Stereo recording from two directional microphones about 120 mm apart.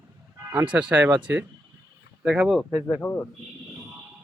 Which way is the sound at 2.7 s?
15° left (ahead or behind).